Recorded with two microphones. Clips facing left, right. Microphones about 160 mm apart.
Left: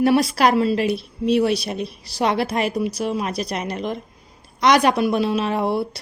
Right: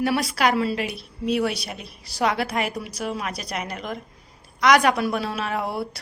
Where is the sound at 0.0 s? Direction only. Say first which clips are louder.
Left 5 dB; 30° left (ahead or behind).